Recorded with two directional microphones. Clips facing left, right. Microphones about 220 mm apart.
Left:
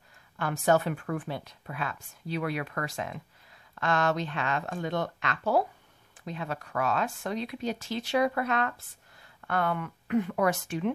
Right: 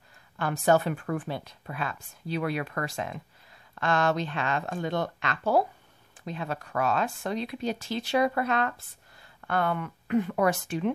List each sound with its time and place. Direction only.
0.4 s speech: 35° right (ahead or behind)